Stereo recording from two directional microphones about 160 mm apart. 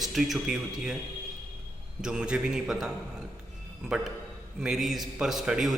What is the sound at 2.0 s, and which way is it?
A man's voice, 5° right (ahead or behind).